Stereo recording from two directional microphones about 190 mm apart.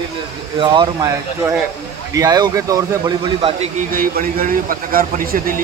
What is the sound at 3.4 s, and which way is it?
Speech, 30° right (ahead or behind).